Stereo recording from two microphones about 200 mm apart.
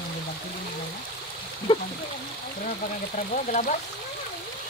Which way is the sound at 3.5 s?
40° left (ahead or behind).